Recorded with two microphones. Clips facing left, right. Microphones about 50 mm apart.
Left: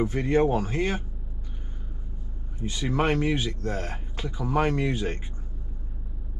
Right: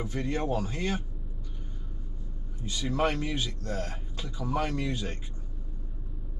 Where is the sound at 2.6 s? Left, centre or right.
Left.